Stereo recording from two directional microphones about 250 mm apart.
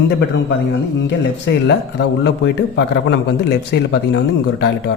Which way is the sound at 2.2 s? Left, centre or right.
Left.